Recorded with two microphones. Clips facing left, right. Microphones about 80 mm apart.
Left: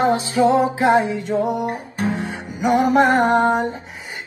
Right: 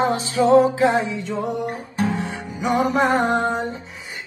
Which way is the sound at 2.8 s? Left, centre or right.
Left.